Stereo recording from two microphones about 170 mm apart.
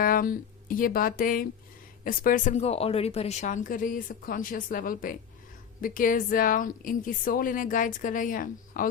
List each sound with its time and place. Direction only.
0.0 s speech: 55° left (ahead or behind)